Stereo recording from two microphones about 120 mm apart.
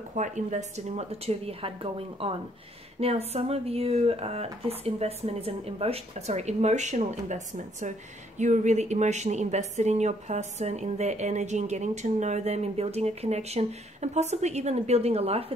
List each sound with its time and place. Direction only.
0.1 s a woman's voice: 80° right; by 15.4 s 60° right (ahead or behind)